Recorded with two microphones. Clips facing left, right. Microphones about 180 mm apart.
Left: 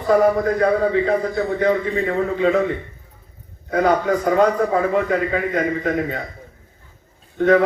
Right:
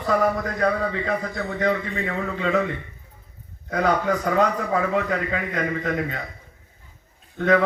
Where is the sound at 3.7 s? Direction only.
40° left (ahead or behind).